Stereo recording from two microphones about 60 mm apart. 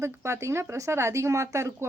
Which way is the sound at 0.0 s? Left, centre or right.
Right.